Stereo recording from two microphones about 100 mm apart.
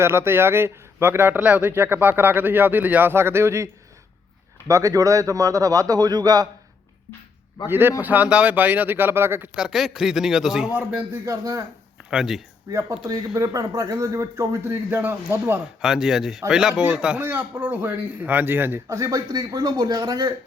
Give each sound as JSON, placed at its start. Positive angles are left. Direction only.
{"t": 0.0, "sound": "speech", "side_deg": -25}
{"t": 4.7, "sound": "speech", "side_deg": -35}
{"t": 7.7, "sound": "speech", "side_deg": -20}
{"t": 9.6, "sound": "a man's voice", "side_deg": -5}
{"t": 11.3, "sound": "speech", "side_deg": -35}
{"t": 12.1, "sound": "a man's voice", "side_deg": -5}
{"t": 12.7, "sound": "speech", "side_deg": -35}
{"t": 15.8, "sound": "a man's voice", "side_deg": -5}
{"t": 18.9, "sound": "speech", "side_deg": -35}